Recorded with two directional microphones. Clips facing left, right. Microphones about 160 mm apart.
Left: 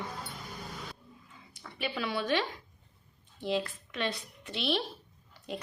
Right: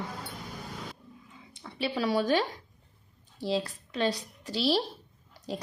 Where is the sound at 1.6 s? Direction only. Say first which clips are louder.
Right 5 dB; 30° right (ahead or behind).